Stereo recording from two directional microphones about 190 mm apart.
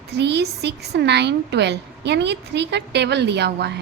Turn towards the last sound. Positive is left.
turn(degrees=-60)  # may be behind; listen again after turning